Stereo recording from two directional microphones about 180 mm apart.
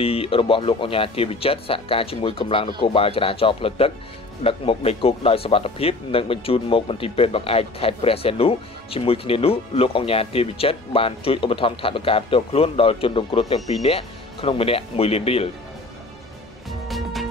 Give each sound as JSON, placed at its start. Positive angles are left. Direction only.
{"t": 0.0, "sound": "speech", "side_deg": 30}
{"t": 16.8, "sound": "music", "side_deg": 0}